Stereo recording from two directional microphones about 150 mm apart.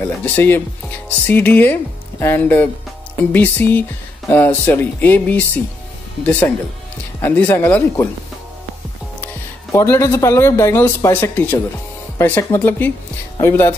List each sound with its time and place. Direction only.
0.0 s speech: 15° left (ahead or behind)
7.2 s speech: 15° left (ahead or behind)
9.2 s speech: 20° left (ahead or behind)